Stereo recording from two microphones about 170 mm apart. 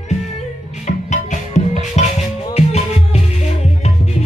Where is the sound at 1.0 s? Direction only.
45° left (ahead or behind).